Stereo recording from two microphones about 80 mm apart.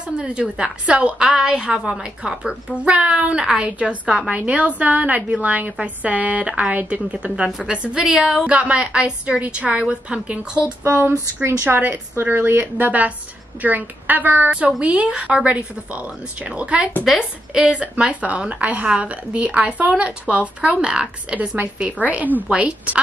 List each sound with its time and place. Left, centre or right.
0.2 s a woman's voice: centre